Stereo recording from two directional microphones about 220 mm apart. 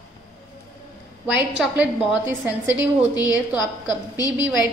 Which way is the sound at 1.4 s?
5° right (ahead or behind).